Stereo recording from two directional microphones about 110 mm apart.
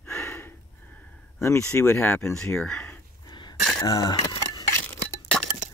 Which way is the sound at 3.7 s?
35° left (ahead or behind).